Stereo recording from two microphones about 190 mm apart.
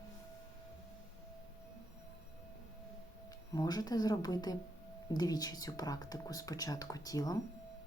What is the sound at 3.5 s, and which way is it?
Speech, 20° left (ahead or behind).